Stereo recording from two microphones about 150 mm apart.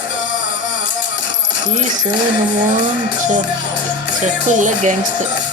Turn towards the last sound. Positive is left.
turn(degrees=-55)  # may be behind; listen again after turning